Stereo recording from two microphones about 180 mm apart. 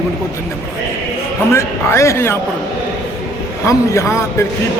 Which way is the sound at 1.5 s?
15° left (ahead or behind).